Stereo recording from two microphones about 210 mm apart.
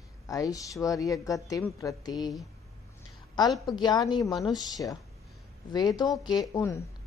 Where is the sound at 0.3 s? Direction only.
15° left (ahead or behind).